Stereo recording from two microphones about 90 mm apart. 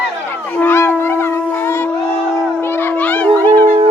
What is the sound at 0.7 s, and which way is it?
Howl, 25° left (ahead or behind).